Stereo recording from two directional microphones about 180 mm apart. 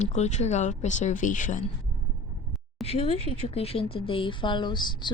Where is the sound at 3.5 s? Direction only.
35° left (ahead or behind).